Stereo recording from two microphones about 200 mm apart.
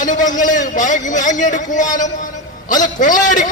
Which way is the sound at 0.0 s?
40° left (ahead or behind).